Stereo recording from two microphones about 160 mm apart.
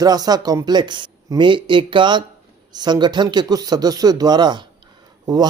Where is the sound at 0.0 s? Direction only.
25° right (ahead or behind).